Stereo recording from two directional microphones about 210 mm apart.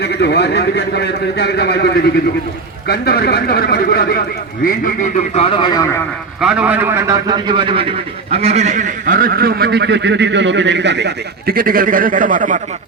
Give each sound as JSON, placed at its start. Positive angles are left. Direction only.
{"t": 0.0, "sound": "speech", "side_deg": 55}
{"t": 4.6, "sound": "speech", "side_deg": 35}
{"t": 6.4, "sound": "a man's voice", "side_deg": -5}